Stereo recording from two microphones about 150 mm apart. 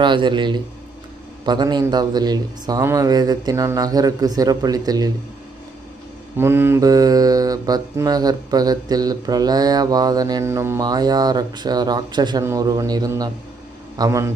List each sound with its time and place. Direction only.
0.0 s a man's voice: 30° right (ahead or behind)
1.5 s mantra: 30° right (ahead or behind)
6.3 s mantra: 15° right (ahead or behind)
13.9 s a man's voice: 25° right (ahead or behind)